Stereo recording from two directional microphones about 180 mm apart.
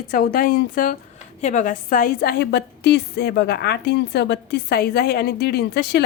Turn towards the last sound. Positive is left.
turn(degrees=65)  # may be behind; listen again after turning